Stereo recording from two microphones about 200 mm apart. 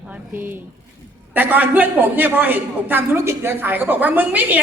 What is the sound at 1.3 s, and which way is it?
A woman's voice, 10° right (ahead or behind).